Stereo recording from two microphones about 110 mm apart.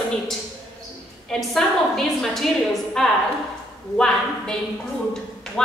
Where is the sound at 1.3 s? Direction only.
Centre (ahead or behind).